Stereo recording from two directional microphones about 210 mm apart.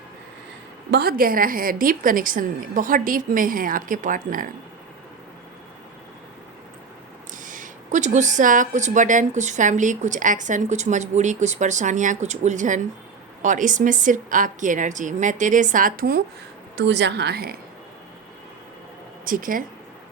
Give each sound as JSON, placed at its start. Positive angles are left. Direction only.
{"t": 0.9, "sound": "speech", "side_deg": -50}
{"t": 7.4, "sound": "speech", "side_deg": -40}
{"t": 16.7, "sound": "a woman's voice", "side_deg": -55}
{"t": 19.2, "sound": "speech", "side_deg": -40}